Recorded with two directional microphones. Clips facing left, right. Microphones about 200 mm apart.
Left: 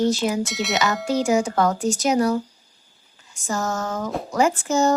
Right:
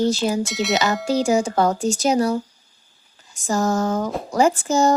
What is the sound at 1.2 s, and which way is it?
Speech, 30° right (ahead or behind).